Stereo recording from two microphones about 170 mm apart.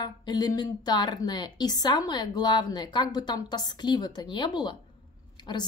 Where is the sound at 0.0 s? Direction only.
25° left (ahead or behind).